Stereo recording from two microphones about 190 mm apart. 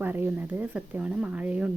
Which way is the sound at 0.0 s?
10° right (ahead or behind).